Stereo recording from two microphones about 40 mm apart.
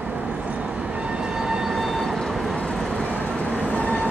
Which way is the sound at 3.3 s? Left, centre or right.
Left.